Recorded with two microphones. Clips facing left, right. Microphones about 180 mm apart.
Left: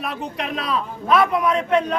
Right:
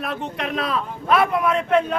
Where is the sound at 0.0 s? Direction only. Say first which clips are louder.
Even; centre (ahead or behind).